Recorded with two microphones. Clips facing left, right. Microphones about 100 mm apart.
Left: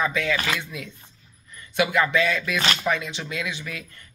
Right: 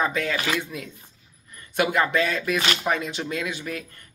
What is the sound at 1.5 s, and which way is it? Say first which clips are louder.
Speech: even; 45° right (ahead or behind).